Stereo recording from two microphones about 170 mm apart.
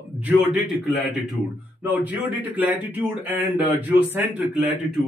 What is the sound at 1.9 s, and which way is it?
Speech, 10° right (ahead or behind).